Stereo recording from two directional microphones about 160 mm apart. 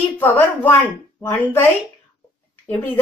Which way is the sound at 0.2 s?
10° left (ahead or behind).